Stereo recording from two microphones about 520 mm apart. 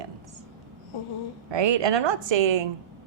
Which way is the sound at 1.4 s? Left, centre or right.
Right.